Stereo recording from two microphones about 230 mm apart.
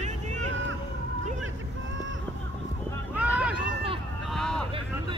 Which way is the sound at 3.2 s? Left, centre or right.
Centre.